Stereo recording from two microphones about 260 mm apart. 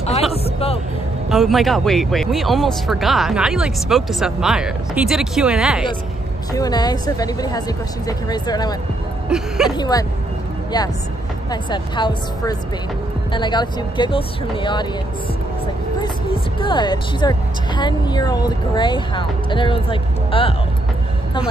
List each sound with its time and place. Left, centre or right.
0.3 s a sound: left
1.3 s speech: centre
6.5 s speech: centre
9.3 s speech: centre
9.7 s speech: centre
11.5 s speech: centre
16.5 s speech: centre